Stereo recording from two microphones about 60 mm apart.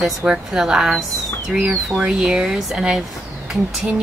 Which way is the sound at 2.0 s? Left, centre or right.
Centre.